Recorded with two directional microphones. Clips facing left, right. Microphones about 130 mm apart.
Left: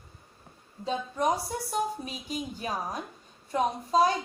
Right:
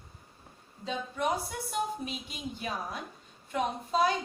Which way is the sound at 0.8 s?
40° left (ahead or behind).